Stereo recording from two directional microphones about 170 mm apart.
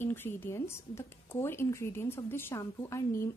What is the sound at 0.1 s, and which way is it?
A woman's voice, 10° left (ahead or behind).